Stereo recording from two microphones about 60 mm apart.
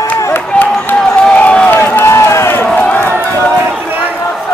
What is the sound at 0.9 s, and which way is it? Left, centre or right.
Crowd, centre.